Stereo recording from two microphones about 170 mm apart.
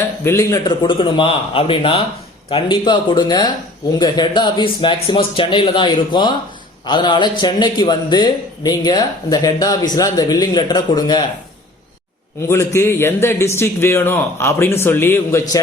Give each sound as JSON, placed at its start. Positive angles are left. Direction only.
{"t": 0.3, "sound": "a man's voice", "side_deg": 20}
{"t": 12.4, "sound": "a man's voice", "side_deg": 15}